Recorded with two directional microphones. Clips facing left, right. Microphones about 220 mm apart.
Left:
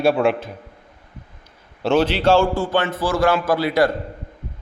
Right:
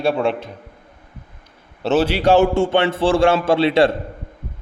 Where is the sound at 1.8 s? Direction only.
5° right (ahead or behind); by 3.9 s 25° right (ahead or behind).